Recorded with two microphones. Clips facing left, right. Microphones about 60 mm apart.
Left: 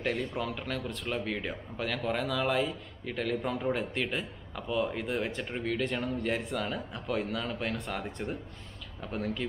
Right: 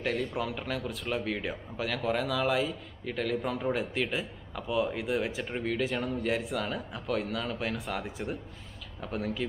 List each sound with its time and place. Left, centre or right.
0.0 s speech: centre